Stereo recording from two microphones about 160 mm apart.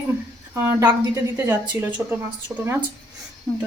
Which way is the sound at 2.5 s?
10° right (ahead or behind).